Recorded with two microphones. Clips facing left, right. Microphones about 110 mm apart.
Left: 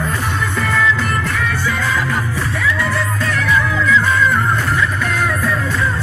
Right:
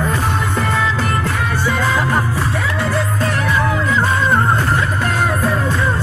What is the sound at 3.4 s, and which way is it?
Music, 40° right (ahead or behind).